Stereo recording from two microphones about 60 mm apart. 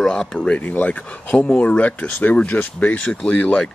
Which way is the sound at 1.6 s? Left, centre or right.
Left.